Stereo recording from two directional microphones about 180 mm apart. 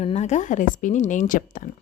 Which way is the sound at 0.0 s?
35° left (ahead or behind).